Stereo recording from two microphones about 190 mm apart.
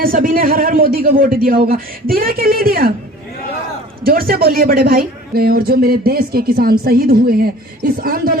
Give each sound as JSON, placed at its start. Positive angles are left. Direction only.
{"t": 0.0, "sound": "speech", "side_deg": -50}
{"t": 4.0, "sound": "speech", "side_deg": -50}